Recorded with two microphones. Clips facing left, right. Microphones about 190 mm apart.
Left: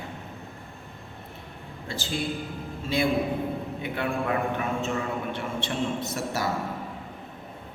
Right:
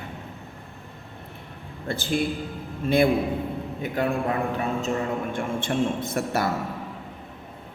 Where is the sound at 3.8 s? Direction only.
40° right (ahead or behind); by 6.5 s 55° right (ahead or behind).